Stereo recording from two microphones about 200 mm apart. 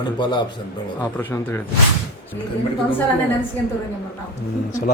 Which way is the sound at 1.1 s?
10° left (ahead or behind).